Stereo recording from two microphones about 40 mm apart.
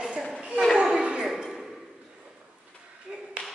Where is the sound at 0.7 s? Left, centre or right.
Right.